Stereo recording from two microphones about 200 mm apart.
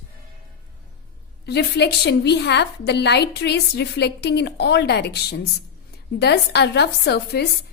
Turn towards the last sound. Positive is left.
turn(degrees=55)  # may be behind; listen again after turning